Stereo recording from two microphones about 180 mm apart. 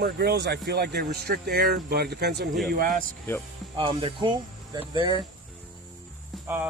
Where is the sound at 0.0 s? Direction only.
65° right (ahead or behind).